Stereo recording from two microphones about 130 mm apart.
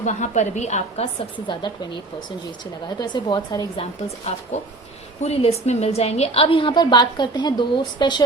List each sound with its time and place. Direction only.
0.0 s a woman's voice: 65° left (ahead or behind)
1.5 s a woman's voice: 35° left (ahead or behind)
3.0 s a woman's voice: 35° left (ahead or behind)
3.8 s a woman's voice: 55° left (ahead or behind); by 8.2 s 35° left (ahead or behind)